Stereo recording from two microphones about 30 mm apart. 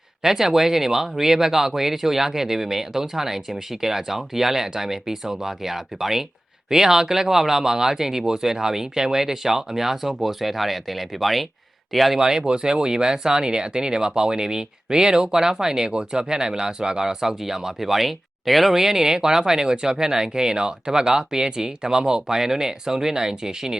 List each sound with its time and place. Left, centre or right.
0.2 s speech: centre
12.2 s speech: right
15.9 s speech: right; by 18.7 s centre
18.7 s speech: centre